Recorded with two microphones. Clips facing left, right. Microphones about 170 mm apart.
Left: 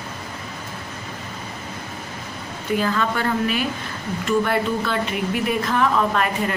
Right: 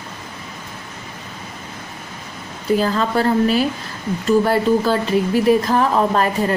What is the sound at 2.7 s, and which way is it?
Speech, 35° right (ahead or behind).